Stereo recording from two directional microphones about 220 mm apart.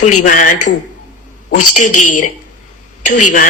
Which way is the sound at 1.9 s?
90° left.